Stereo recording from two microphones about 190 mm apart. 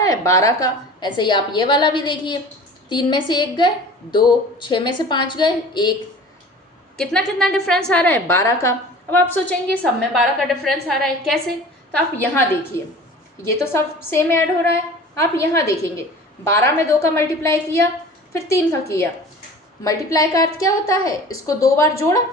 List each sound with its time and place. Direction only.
0.0 s a woman's voice: 20° left (ahead or behind)
6.9 s a woman's voice: 5° left (ahead or behind)